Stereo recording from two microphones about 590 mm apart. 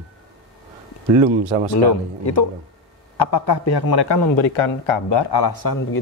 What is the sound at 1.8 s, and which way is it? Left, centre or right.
Speech, left.